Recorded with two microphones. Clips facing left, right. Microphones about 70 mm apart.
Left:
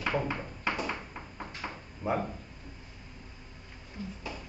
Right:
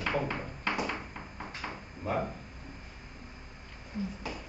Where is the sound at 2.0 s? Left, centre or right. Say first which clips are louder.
Left 2 dB; centre.